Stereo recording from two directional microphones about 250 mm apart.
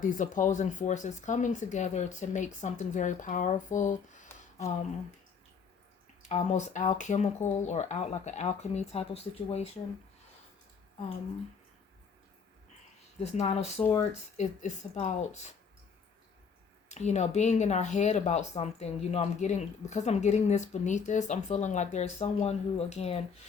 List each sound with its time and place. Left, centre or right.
0.0 s speech: left
4.3 s a sound: centre
6.2 s speech: left
13.2 s speech: left
16.9 s speech: left